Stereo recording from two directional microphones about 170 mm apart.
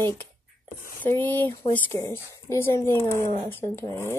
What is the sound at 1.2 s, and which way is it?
A woman's voice, 10° left (ahead or behind).